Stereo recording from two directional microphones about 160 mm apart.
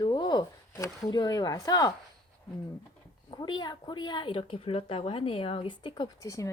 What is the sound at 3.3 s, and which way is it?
Speech, 25° left (ahead or behind).